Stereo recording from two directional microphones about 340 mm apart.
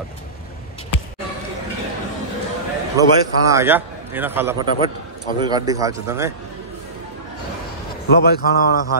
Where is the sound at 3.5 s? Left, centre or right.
Centre.